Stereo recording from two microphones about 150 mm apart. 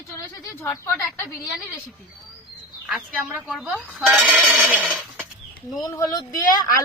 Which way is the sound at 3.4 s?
Centre (ahead or behind).